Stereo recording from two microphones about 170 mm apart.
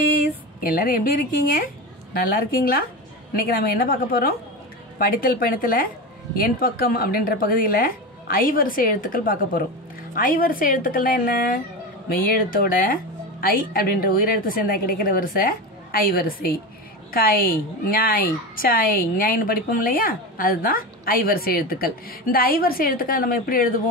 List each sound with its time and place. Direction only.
0.6 s a woman's voice: 60° left (ahead or behind)